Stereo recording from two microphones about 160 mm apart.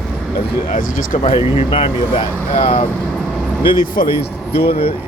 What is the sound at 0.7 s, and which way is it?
Speech, 55° left (ahead or behind).